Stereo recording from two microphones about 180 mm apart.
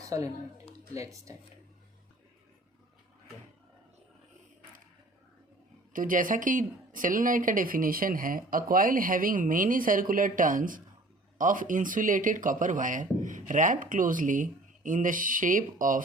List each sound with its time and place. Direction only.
0.0 s a sound: 20° right (ahead or behind)
0.9 s speech: 20° right (ahead or behind)
5.9 s speech: 50° right (ahead or behind)